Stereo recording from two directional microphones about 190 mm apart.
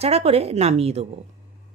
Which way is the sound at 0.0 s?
30° right (ahead or behind).